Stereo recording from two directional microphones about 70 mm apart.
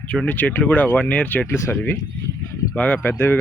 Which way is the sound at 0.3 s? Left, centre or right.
Left.